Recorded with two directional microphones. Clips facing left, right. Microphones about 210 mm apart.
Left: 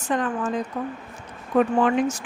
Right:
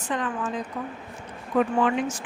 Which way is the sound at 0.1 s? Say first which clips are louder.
Left 4 dB; 45° left (ahead or behind).